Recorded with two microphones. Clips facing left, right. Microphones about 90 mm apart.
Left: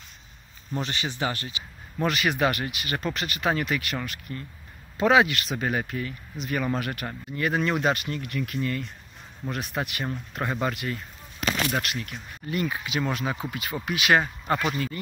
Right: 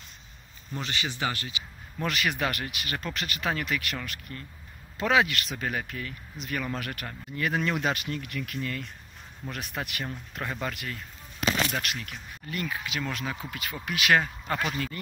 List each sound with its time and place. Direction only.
0.7 s speech: 30° left (ahead or behind)
2.0 s speech: 10° left (ahead or behind)
10.3 s speech: 15° left (ahead or behind)
12.4 s speech: 15° left (ahead or behind)